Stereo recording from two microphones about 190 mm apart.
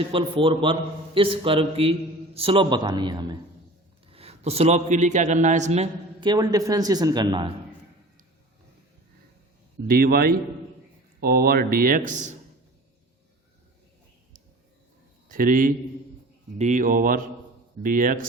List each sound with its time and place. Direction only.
0.1 s a man's voice: 30° right (ahead or behind)
9.8 s speech: 55° right (ahead or behind)
15.3 s a man's voice: 45° right (ahead or behind)